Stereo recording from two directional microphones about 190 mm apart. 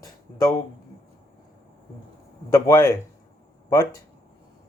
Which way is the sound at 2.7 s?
15° left (ahead or behind).